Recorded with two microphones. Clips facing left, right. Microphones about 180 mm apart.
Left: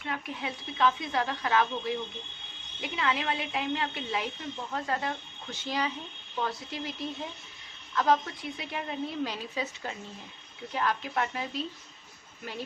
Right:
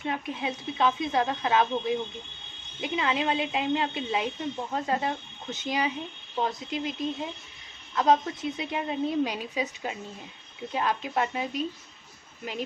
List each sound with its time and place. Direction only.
0.0 s a woman's voice: 20° right (ahead or behind)